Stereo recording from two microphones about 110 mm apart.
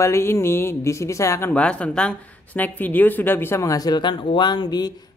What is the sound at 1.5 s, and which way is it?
Speech, 10° left (ahead or behind).